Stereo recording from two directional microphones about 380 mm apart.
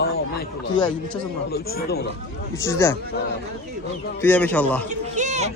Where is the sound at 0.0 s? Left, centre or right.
Left.